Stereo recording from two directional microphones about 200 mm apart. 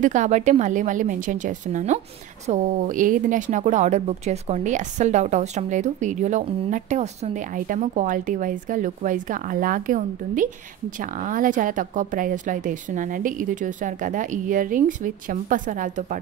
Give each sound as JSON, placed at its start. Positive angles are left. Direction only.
{"t": 0.0, "sound": "speech", "side_deg": -35}